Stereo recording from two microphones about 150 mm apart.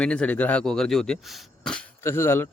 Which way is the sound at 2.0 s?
15° left (ahead or behind).